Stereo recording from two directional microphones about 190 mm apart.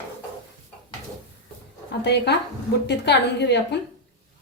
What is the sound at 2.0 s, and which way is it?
A woman's voice, 60° left (ahead or behind).